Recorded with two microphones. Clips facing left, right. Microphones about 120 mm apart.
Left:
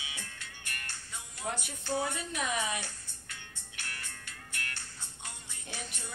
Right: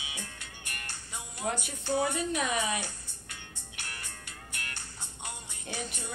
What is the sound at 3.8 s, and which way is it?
Music, 15° right (ahead or behind).